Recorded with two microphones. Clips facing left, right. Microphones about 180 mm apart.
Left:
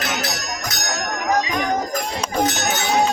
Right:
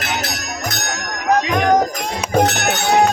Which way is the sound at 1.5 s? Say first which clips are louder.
Right 7 dB; 60° right (ahead or behind).